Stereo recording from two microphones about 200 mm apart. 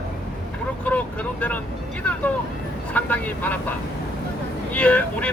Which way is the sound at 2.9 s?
5° left (ahead or behind).